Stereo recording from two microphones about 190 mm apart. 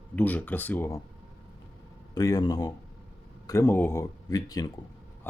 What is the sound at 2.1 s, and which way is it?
Speech, 20° left (ahead or behind).